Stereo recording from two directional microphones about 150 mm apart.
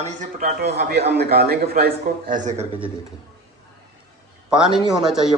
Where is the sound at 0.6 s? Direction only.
90° right.